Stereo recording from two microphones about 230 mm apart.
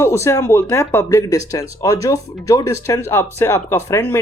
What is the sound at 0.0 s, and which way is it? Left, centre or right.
Speech, centre.